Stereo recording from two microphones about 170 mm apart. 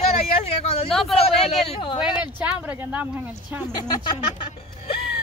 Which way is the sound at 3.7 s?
30° left (ahead or behind).